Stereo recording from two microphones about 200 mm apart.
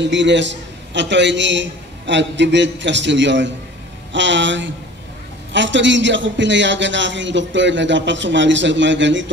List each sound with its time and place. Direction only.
0.0 s a man's voice: 65° right (ahead or behind)